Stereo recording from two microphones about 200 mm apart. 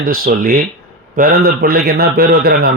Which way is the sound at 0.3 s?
45° right (ahead or behind).